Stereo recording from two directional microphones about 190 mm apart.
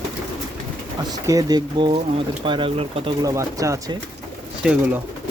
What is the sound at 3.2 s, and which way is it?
Speech, 15° right (ahead or behind).